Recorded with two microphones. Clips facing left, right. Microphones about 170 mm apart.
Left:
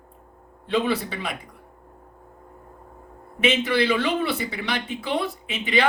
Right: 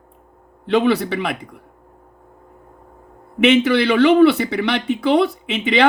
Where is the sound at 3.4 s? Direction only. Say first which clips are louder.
Right 7 dB; 70° right (ahead or behind).